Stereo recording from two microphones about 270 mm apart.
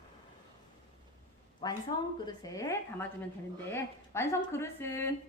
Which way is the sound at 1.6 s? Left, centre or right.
Centre.